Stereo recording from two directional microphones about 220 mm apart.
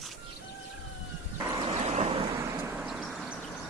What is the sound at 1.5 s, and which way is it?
Vehicle, 25° right (ahead or behind).